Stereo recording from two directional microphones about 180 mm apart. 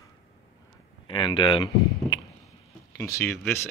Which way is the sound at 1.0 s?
25° left (ahead or behind).